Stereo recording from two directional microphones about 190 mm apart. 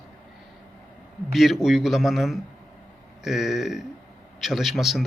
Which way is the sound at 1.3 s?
Centre (ahead or behind).